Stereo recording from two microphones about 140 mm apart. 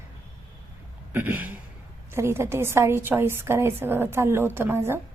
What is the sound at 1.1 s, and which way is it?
A woman's voice, 15° right (ahead or behind).